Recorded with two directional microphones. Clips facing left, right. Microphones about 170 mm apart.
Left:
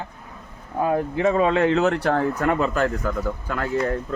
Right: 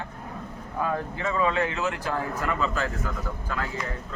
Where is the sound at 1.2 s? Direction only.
60° left (ahead or behind).